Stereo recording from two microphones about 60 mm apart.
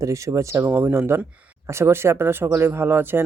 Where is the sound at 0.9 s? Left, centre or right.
Right.